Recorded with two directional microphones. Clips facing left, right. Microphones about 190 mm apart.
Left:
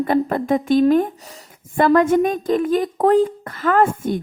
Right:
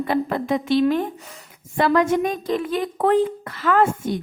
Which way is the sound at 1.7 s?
50° left (ahead or behind).